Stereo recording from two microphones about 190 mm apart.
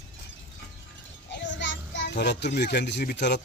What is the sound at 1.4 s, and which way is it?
A child's voice, 70° left (ahead or behind).